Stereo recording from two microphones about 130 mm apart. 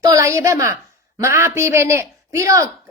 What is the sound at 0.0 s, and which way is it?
A woman's voice, 25° right (ahead or behind).